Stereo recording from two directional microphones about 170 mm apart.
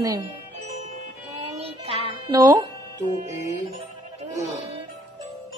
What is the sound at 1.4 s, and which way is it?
Music, 35° right (ahead or behind).